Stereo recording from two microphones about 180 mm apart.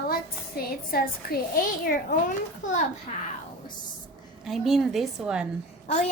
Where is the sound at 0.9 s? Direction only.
55° left (ahead or behind).